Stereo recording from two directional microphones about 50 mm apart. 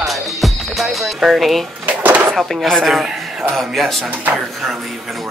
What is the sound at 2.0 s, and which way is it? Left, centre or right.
Drawer open or close, right.